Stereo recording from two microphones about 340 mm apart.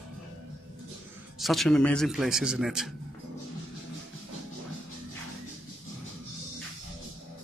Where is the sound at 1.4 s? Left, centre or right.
Centre.